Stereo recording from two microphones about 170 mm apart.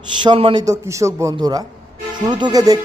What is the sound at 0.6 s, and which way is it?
A man's voice, 15° right (ahead or behind).